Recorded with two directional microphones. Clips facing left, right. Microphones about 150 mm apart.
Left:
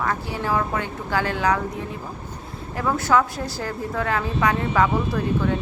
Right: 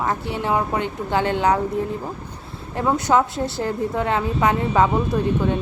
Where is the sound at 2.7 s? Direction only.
25° right (ahead or behind).